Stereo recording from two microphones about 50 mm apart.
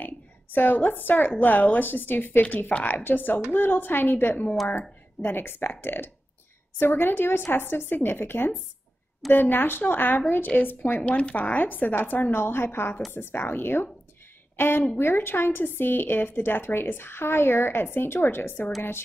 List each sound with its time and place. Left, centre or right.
0.0 s a woman's voice: left
11.0 s speech: left
11.5 s a woman's voice: left